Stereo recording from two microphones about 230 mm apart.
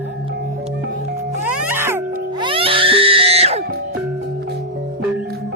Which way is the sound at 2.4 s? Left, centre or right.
Right.